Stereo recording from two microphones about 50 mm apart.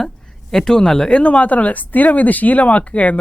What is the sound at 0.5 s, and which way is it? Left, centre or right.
Speech, centre.